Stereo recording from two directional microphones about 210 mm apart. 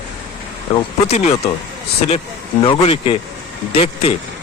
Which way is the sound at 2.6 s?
25° left (ahead or behind).